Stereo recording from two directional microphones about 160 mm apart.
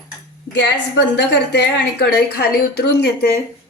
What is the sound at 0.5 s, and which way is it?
A woman's voice, 90° left.